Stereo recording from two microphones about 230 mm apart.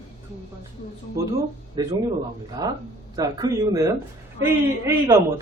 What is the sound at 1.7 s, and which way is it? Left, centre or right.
Speech, centre.